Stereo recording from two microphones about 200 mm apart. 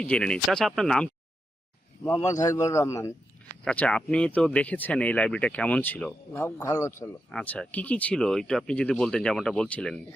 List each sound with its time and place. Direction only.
0.0 s speech: 5° left (ahead or behind)
2.0 s speech: 15° left (ahead or behind)